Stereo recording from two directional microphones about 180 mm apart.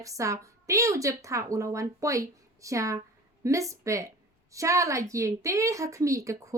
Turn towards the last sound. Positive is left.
turn(degrees=-15)  # may be behind; listen again after turning